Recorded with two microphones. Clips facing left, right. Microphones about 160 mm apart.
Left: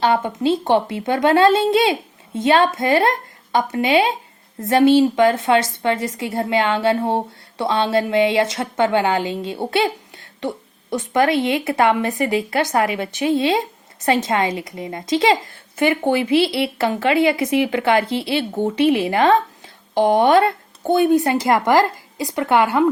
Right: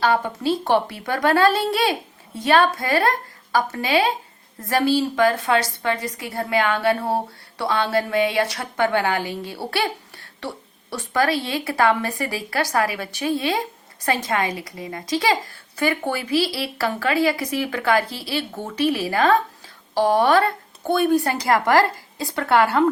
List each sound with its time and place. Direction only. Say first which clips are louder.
0.0 s a woman's voice: left 3 dB; 25° left (ahead or behind)